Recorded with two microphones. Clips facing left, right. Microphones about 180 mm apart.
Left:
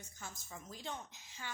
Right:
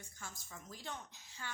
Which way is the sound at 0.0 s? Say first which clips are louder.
Left 1 dB; 20° left (ahead or behind).